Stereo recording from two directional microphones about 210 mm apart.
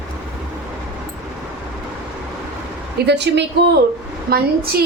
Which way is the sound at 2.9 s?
55° right (ahead or behind).